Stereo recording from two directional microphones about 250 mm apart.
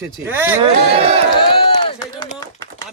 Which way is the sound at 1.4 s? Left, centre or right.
Left.